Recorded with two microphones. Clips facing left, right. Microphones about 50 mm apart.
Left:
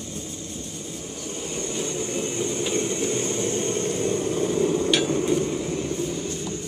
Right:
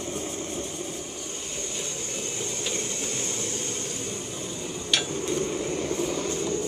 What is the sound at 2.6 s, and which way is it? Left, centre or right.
Vehicle, centre.